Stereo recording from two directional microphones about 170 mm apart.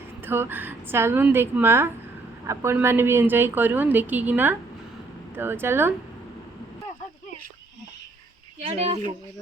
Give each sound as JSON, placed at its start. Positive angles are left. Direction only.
{"t": 0.3, "sound": "a woman's voice", "side_deg": -10}
{"t": 8.6, "sound": "speech", "side_deg": -40}